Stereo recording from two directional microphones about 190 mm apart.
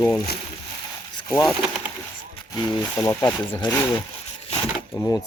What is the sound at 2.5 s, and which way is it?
Speech, 20° left (ahead or behind).